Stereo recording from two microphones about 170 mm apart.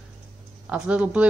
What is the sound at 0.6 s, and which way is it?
Speech, 5° right (ahead or behind).